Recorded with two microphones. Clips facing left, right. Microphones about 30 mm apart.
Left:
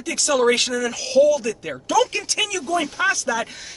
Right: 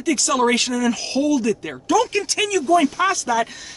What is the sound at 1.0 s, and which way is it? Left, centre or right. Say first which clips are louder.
Speech: left 6 dB; centre.